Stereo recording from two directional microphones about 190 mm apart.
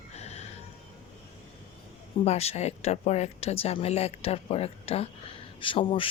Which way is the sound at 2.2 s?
35° left (ahead or behind).